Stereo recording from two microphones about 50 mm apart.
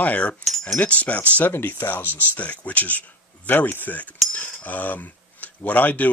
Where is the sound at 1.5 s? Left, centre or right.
Left.